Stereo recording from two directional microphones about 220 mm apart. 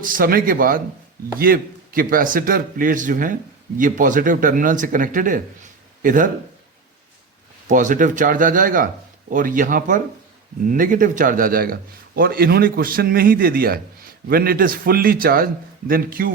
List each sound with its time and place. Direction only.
0.0 s a man's voice: 40° right (ahead or behind)
7.7 s a man's voice: 35° right (ahead or behind)